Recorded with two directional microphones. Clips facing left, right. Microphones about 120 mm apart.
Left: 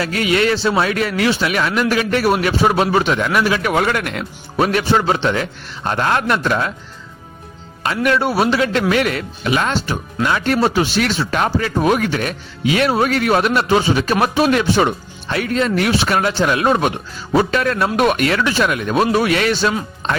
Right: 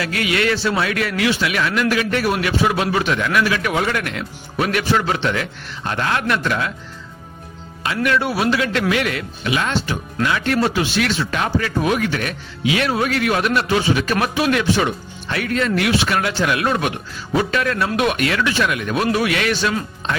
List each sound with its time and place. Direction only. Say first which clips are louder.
0.0 s speech: left 3 dB; 30° left (ahead or behind)
3.7 s speech: left 3 dB; 50° left (ahead or behind)
4.5 s speech: left 3 dB; 30° left (ahead or behind)
8.0 s speech: left 3 dB; 35° left (ahead or behind)